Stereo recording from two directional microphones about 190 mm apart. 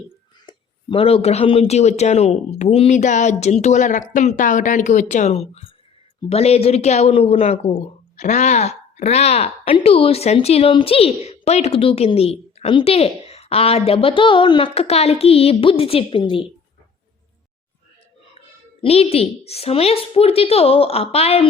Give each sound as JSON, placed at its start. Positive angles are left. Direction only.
{"t": 0.4, "sound": "a woman's voice", "side_deg": 25}
{"t": 18.8, "sound": "a woman's voice", "side_deg": 30}